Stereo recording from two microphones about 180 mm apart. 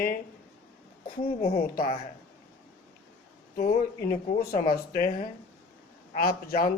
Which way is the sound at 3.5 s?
55° left (ahead or behind).